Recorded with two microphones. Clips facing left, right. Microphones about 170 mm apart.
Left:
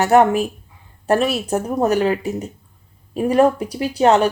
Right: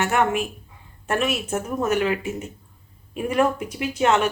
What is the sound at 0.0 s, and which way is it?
Speech, 35° left (ahead or behind).